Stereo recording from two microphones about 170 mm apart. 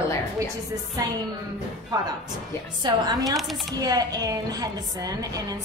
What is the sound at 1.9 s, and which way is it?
A woman's voice, 25° right (ahead or behind).